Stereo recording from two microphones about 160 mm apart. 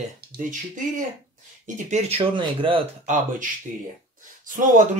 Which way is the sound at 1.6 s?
45° right (ahead or behind).